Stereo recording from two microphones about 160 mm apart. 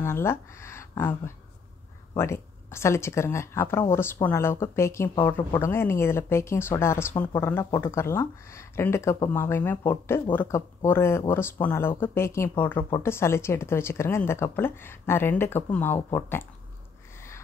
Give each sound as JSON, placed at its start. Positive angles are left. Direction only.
{"t": 0.0, "sound": "speech", "side_deg": 15}